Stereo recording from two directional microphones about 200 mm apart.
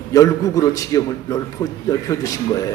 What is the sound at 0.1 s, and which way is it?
A man's voice, 15° left (ahead or behind).